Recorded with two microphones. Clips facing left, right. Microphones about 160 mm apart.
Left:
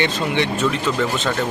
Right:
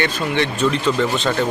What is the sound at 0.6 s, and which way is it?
Speech, 5° left (ahead or behind).